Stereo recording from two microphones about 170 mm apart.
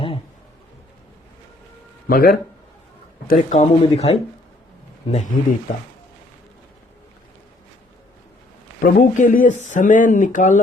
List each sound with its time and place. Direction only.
2.0 s speech: 60° left (ahead or behind)
3.2 s speech: 45° left (ahead or behind)
8.8 s speech: 50° left (ahead or behind)